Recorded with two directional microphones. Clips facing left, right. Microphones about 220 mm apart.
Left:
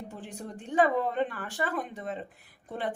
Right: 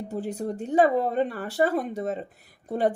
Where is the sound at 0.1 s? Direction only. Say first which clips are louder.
Right 11 dB; 40° right (ahead or behind).